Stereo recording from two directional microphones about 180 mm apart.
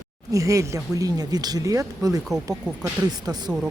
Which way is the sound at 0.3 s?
20° right (ahead or behind).